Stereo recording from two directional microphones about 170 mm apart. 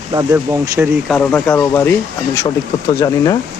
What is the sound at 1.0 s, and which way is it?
Speech, 10° left (ahead or behind).